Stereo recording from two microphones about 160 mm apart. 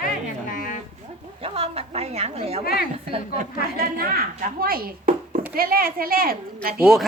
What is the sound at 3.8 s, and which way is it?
Speech, 65° right (ahead or behind).